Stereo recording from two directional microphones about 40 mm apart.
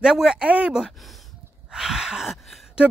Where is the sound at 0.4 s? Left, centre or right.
Right.